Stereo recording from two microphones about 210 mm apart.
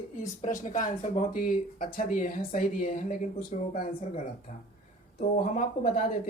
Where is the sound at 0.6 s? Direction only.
35° left (ahead or behind).